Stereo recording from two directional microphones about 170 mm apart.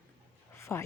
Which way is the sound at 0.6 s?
15° left (ahead or behind).